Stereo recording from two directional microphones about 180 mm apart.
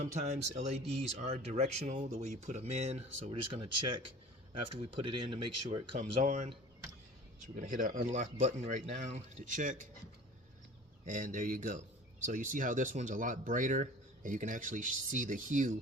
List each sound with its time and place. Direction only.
0.0 s speech: 40° right (ahead or behind)
11.0 s speech: 45° right (ahead or behind)